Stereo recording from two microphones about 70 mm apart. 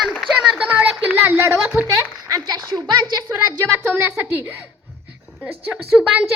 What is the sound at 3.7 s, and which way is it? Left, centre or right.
Speech, right.